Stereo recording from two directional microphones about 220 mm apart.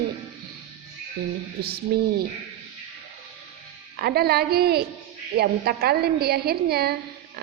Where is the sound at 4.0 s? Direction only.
45° right (ahead or behind).